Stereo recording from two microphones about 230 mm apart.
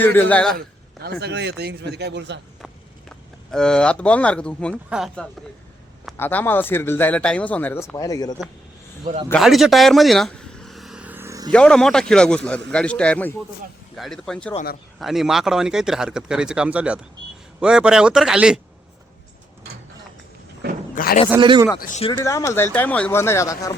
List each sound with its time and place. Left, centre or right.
0.0 s speech: centre
1.0 s speech: right
3.5 s speech: centre
9.3 s vehicle: centre
11.5 s speech: centre
14.5 s speech: left
14.9 s speech: centre
20.9 s a man's voice: left
21.2 s speech: centre
21.8 s speech: left
22.2 s speech: centre